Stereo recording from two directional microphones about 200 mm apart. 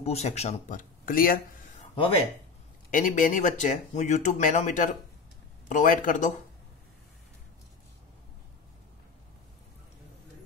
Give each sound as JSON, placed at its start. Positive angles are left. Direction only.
{"t": 0.0, "sound": "speech", "side_deg": 35}
{"t": 2.9, "sound": "speech", "side_deg": 40}